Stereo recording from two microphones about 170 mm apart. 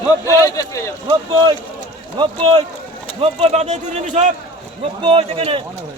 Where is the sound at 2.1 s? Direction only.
35° right (ahead or behind).